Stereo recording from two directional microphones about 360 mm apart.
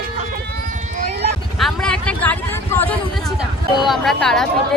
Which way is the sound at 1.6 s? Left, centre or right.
Centre.